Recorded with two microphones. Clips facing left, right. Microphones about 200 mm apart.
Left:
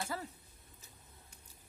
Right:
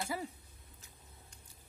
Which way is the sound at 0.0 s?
10° right (ahead or behind).